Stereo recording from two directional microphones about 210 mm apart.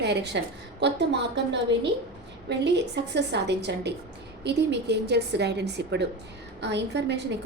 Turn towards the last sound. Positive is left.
turn(degrees=-55)  # may be behind; listen again after turning